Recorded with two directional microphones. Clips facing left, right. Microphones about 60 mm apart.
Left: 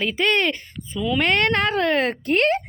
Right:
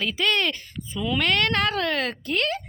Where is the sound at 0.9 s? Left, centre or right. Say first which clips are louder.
Left 3 dB; centre.